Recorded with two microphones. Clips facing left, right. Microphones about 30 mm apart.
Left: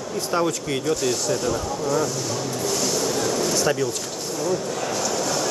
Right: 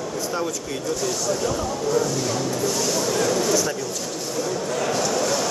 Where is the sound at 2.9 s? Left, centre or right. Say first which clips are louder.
Right 2 dB; centre.